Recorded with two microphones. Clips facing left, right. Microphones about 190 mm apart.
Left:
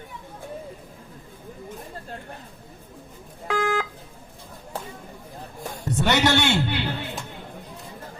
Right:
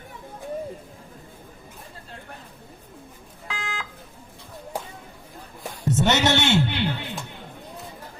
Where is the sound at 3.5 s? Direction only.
55° left (ahead or behind).